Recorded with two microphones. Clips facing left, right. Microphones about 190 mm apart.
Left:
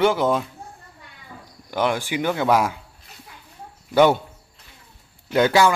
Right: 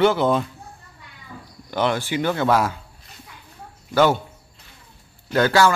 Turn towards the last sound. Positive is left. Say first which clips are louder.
# even
turn(degrees=15)  # may be behind; listen again after turning